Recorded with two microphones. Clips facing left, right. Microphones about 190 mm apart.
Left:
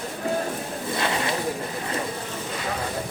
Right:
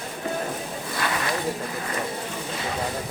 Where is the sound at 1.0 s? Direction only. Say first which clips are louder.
Left 1 dB; 25° left (ahead or behind).